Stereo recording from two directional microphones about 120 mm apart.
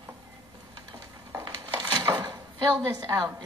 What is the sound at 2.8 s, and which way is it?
Speech, 20° right (ahead or behind).